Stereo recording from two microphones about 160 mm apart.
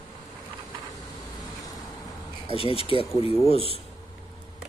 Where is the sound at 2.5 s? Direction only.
35° left (ahead or behind).